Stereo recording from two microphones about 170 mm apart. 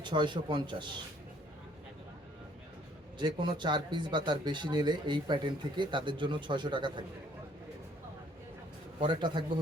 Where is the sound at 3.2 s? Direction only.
25° right (ahead or behind).